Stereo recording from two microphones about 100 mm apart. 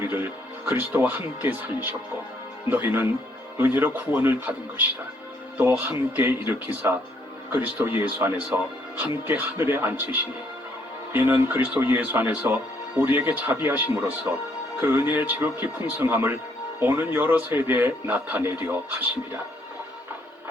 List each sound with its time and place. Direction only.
0.1 s speech: 15° right (ahead or behind)